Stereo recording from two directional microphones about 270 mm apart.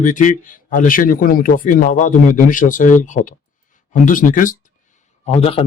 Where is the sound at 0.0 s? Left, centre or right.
Left.